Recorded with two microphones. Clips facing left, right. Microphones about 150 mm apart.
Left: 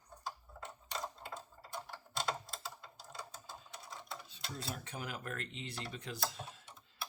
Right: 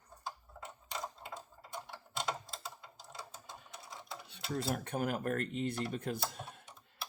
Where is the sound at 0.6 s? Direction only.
5° right (ahead or behind).